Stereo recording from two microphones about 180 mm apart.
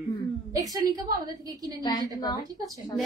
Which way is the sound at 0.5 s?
20° right (ahead or behind).